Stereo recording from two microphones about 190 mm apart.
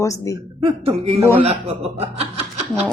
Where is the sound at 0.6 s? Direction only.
30° right (ahead or behind).